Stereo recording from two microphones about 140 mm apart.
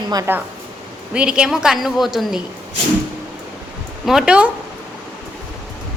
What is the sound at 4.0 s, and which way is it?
Speech, 5° right (ahead or behind).